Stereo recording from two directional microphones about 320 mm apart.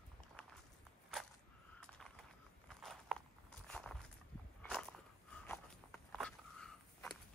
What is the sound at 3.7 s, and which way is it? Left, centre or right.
Walk, centre.